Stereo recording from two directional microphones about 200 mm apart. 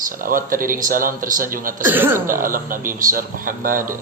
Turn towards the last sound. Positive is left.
turn(degrees=-45)  # may be behind; listen again after turning